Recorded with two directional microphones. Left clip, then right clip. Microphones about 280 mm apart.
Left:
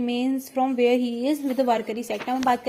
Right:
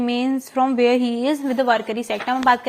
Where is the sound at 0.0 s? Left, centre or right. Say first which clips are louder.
Right 4 dB; centre.